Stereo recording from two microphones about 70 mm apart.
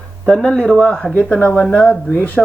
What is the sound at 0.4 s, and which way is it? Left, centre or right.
Speech, centre.